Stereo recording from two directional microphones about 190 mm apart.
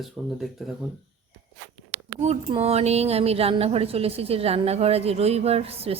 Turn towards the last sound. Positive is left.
turn(degrees=-30)  # may be behind; listen again after turning